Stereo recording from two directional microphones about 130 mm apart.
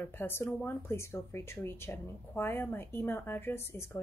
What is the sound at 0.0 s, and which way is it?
Speech, 15° left (ahead or behind).